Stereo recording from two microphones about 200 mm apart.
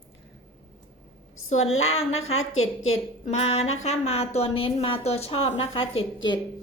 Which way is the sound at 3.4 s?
30° left (ahead or behind).